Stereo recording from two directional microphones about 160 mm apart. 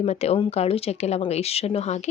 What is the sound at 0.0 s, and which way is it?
Speech, 40° left (ahead or behind).